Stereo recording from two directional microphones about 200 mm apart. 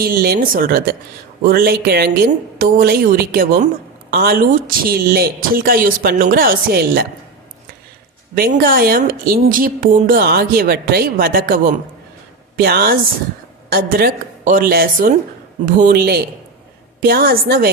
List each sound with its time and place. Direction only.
0.0 s a woman's voice: 50° right (ahead or behind)
8.4 s a woman's voice: 45° right (ahead or behind)